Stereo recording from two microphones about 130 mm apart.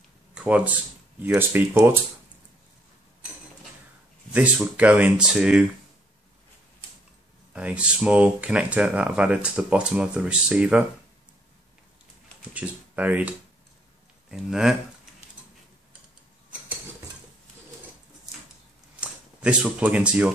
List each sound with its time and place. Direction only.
0.3 s speech: 10° right (ahead or behind)
4.3 s speech: 10° right (ahead or behind)
7.5 s speech: 10° right (ahead or behind)
12.4 s speech: 10° right (ahead or behind)
14.3 s speech: 5° right (ahead or behind)
18.9 s speech: 10° right (ahead or behind)